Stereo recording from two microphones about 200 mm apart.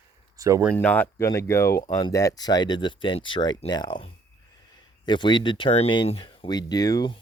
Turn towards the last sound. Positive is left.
turn(degrees=20)  # may be behind; listen again after turning